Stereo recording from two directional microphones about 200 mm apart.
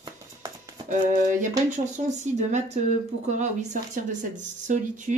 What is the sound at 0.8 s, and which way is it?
Speech, 40° right (ahead or behind).